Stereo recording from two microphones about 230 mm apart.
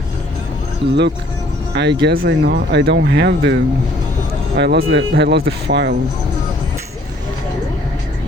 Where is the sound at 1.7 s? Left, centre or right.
Right.